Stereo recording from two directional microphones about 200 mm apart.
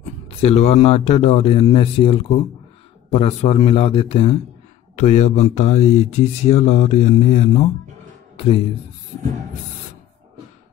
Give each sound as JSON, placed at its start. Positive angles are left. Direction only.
{"t": 0.4, "sound": "a man's voice", "side_deg": 30}